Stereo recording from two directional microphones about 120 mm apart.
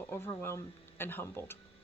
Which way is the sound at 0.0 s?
20° left (ahead or behind).